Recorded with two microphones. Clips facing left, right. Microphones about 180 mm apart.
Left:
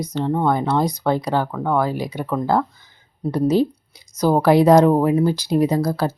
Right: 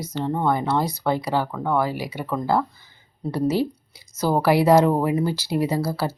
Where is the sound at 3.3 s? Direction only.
15° left (ahead or behind).